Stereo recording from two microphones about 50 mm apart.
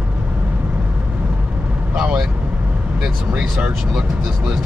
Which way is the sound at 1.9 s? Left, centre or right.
Centre.